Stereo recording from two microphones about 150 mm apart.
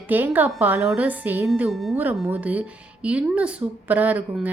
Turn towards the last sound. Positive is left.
turn(degrees=-10)  # may be behind; listen again after turning